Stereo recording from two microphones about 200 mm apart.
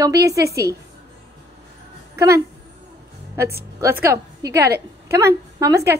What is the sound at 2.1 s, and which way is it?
Speech, 15° right (ahead or behind).